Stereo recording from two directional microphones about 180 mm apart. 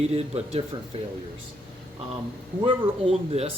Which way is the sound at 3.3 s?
35° right (ahead or behind).